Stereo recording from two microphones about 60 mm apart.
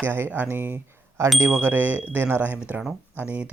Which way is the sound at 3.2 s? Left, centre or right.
Right.